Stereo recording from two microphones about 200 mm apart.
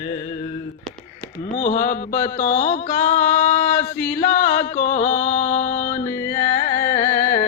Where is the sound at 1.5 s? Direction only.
40° left (ahead or behind).